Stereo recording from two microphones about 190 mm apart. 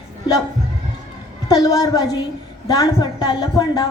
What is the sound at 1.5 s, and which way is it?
A woman's voice, 20° left (ahead or behind).